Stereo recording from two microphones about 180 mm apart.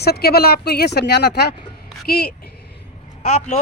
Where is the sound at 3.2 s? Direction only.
40° left (ahead or behind).